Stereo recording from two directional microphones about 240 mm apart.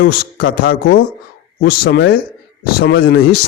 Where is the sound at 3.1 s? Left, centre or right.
Left.